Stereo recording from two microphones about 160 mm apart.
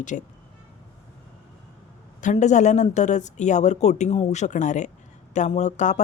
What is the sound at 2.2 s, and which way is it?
A woman's voice, 50° left (ahead or behind).